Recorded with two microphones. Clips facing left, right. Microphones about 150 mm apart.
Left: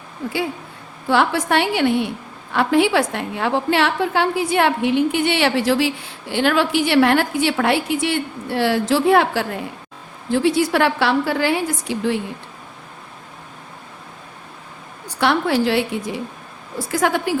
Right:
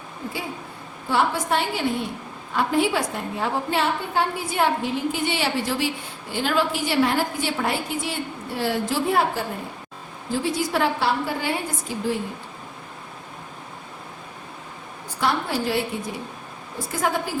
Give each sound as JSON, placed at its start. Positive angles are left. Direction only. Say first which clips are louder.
{"t": 1.1, "sound": "a woman's voice", "louder": "left 5 dB", "side_deg": 80}
{"t": 10.3, "sound": "a woman's voice", "louder": "left 7 dB", "side_deg": 70}
{"t": 15.2, "sound": "a woman's voice", "louder": "left 6 dB", "side_deg": 85}
{"t": 16.7, "sound": "a woman's voice", "louder": "left 5 dB", "side_deg": 80}